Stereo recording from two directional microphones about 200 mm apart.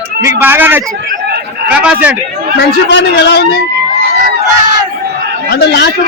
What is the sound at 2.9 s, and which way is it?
Speech, 60° left (ahead or behind).